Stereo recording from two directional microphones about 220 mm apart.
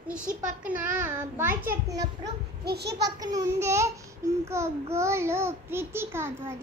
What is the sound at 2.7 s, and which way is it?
Speech, 50° right (ahead or behind).